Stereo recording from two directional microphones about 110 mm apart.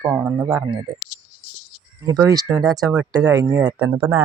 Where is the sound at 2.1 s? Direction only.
35° right (ahead or behind).